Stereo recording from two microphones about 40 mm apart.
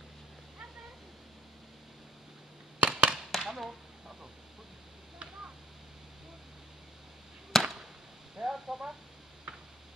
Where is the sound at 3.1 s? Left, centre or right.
Centre.